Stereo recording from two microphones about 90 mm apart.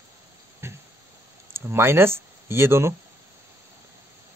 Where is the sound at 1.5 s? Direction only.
25° right (ahead or behind).